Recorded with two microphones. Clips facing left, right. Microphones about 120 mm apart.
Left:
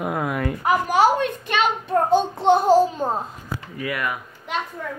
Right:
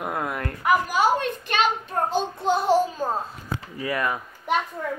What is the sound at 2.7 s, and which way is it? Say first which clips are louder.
Speech: left 4 dB; 30° left (ahead or behind).